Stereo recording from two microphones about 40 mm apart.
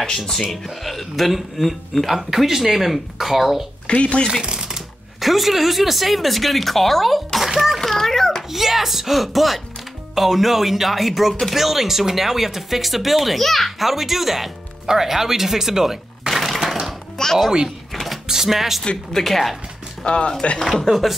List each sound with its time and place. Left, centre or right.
0.2 s speech: centre
3.8 s speech: left
4.3 s a sound: centre
5.2 s speech: centre
7.3 s a sound: centre
7.8 s a sound: centre
8.5 s speech: centre
17.2 s music: centre
17.9 s a sound: centre
18.3 s speech: centre
19.1 s speech: centre
20.1 s speech: left
20.6 s speech: centre